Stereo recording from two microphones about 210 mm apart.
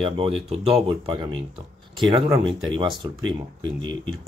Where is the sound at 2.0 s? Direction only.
15° right (ahead or behind).